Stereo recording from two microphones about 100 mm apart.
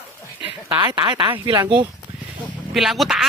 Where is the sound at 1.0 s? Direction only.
55° right (ahead or behind).